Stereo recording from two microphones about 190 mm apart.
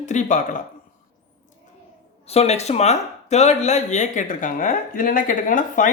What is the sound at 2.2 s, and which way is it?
Speech, 35° left (ahead or behind).